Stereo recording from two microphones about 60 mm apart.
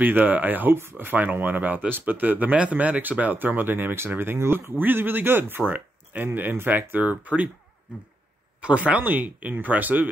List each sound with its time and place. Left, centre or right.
0.0 s speech: right
8.5 s speech: right